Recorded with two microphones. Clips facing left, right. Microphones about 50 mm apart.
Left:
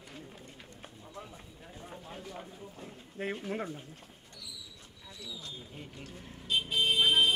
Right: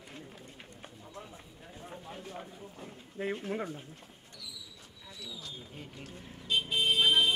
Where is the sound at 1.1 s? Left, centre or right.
Centre.